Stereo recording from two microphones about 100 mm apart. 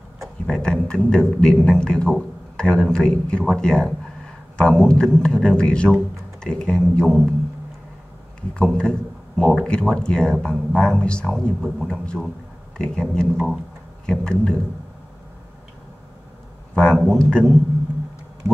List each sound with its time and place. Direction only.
0.5 s a man's voice: 5° left (ahead or behind)
8.4 s a man's voice: 10° left (ahead or behind)
16.7 s a man's voice: 5° left (ahead or behind)